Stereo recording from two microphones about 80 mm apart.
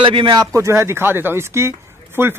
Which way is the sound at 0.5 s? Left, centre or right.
Right.